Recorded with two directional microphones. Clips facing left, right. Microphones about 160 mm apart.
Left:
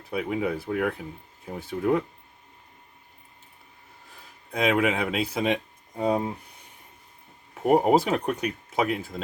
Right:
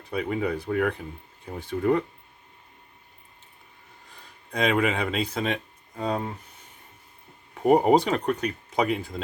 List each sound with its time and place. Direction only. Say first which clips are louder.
0.1 s speech: even; 5° left (ahead or behind)
4.5 s speech: even; 5° left (ahead or behind)
7.5 s speech: right 1 dB; centre (ahead or behind)